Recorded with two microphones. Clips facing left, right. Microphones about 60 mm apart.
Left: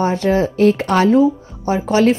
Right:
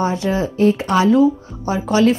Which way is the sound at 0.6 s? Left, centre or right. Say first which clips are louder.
Right 1 dB; left.